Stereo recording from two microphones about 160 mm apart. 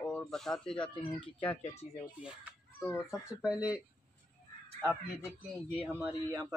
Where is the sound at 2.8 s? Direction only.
15° left (ahead or behind).